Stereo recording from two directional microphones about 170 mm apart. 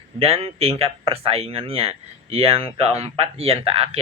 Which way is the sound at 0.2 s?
35° right (ahead or behind).